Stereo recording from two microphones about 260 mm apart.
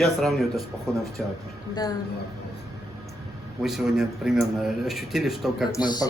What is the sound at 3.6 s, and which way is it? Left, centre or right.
A man's voice, centre.